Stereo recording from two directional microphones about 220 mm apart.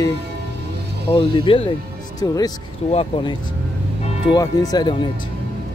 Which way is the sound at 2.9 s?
25° left (ahead or behind).